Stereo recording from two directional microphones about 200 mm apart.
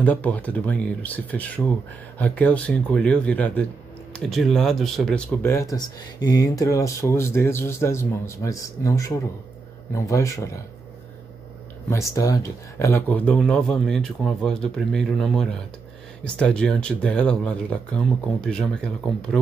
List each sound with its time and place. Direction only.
0.0 s speech: 5° left (ahead or behind)
11.9 s speech: 15° left (ahead or behind)